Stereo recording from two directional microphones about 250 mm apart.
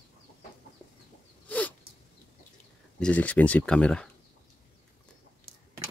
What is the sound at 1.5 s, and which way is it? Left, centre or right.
Sneeze, centre.